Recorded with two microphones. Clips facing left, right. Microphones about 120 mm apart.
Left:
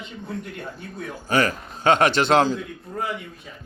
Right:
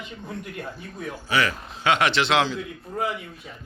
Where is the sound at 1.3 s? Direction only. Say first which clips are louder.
Left 3 dB; 45° left (ahead or behind).